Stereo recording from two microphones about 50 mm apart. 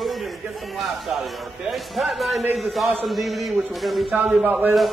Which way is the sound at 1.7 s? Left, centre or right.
Centre.